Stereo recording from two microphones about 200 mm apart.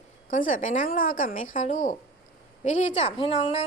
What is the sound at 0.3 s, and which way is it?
A woman's voice, 40° left (ahead or behind).